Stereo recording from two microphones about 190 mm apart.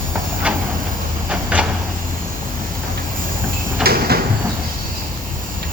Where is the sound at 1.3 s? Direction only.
5° right (ahead or behind).